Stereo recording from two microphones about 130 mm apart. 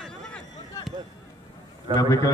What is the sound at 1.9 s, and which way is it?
Speech, 25° left (ahead or behind).